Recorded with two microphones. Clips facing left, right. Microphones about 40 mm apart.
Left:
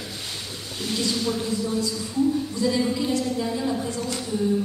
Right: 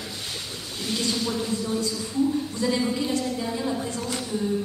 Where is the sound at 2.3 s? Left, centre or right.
Right.